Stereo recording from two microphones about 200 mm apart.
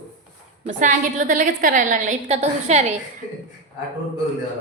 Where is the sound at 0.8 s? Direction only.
40° right (ahead or behind).